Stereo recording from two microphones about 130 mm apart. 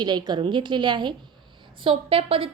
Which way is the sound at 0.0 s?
35° right (ahead or behind).